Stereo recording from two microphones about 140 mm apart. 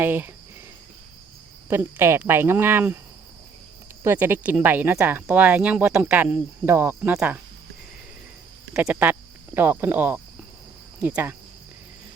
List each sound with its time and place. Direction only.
0.0 s speech: 15° right (ahead or behind)
1.7 s speech: 20° right (ahead or behind)
4.0 s speech: 15° right (ahead or behind)
8.7 s speech: 10° right (ahead or behind)